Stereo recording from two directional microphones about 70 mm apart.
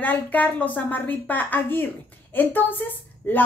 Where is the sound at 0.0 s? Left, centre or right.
Left.